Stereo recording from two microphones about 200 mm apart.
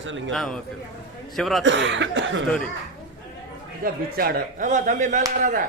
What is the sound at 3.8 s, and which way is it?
Speech, 45° right (ahead or behind).